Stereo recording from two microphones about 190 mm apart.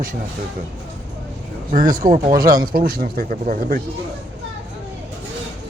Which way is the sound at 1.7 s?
45° right (ahead or behind).